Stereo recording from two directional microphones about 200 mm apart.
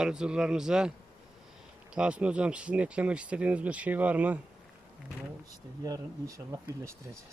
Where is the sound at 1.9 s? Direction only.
5° right (ahead or behind).